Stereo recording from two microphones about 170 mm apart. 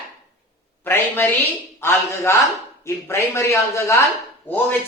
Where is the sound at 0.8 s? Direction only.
10° left (ahead or behind).